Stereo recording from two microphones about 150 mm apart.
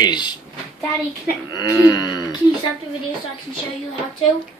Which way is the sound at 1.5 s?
20° left (ahead or behind).